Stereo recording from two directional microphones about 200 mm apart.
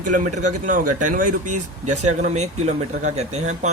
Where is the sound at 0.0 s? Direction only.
40° right (ahead or behind).